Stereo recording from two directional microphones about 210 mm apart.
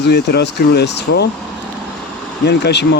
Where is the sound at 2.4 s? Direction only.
55° left (ahead or behind).